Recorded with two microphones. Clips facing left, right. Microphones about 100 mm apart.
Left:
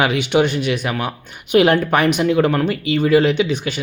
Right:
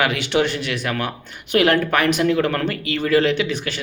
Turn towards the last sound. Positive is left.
turn(degrees=20)  # may be behind; listen again after turning